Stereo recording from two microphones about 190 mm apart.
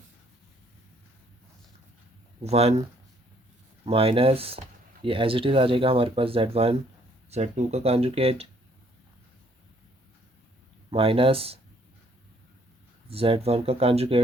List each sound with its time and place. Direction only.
2.4 s speech: 35° right (ahead or behind)
3.8 s speech: 30° right (ahead or behind)
10.9 s speech: 30° right (ahead or behind)
13.1 s speech: 30° right (ahead or behind)